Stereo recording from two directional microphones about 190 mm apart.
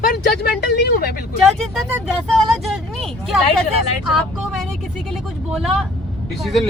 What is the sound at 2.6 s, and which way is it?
Speech, centre (ahead or behind).